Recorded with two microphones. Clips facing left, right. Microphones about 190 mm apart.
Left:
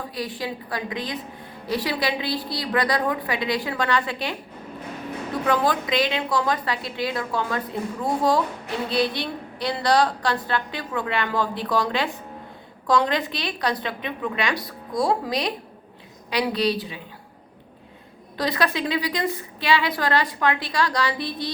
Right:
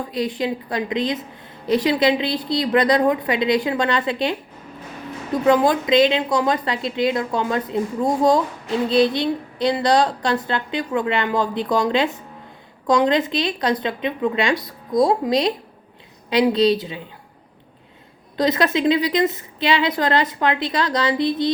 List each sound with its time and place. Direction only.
0.1 s a woman's voice: 20° right (ahead or behind)
5.5 s a woman's voice: 20° right (ahead or behind)
18.3 s a woman's voice: 20° right (ahead or behind)